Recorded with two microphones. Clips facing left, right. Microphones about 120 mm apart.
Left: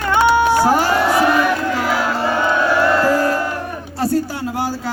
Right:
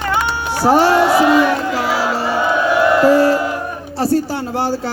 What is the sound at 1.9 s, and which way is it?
Music, 5° right (ahead or behind).